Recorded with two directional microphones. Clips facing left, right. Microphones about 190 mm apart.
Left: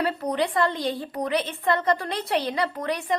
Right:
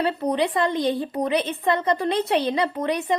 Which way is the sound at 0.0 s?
25° right (ahead or behind).